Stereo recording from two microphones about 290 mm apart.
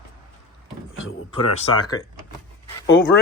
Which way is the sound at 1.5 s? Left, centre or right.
Centre.